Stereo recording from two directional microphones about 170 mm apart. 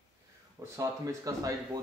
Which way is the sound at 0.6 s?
15° right (ahead or behind).